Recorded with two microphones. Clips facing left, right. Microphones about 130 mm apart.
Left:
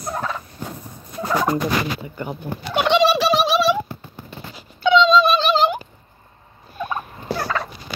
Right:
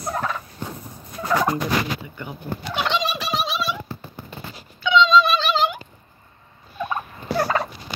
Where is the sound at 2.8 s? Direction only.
75° left (ahead or behind).